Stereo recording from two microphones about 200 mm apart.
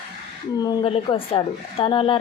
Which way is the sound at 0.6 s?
20° left (ahead or behind).